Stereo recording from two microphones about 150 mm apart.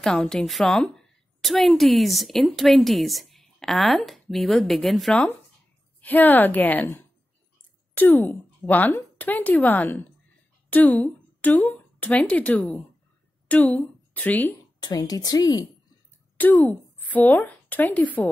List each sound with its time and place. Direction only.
0.0 s a woman's voice: 5° left (ahead or behind)
14.8 s speech: 25° left (ahead or behind)
16.3 s a woman's voice: 10° left (ahead or behind)